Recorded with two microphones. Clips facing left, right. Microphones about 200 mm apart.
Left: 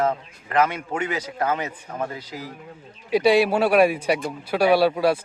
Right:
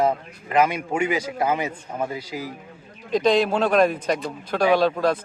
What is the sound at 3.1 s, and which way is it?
A man's voice, 10° left (ahead or behind).